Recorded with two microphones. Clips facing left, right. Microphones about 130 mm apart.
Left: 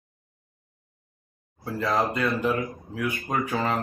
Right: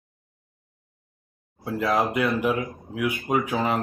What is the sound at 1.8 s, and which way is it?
Speech, 10° right (ahead or behind).